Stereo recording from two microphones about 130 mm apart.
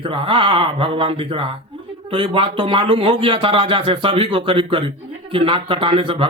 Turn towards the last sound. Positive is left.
turn(degrees=-40)  # may be behind; listen again after turning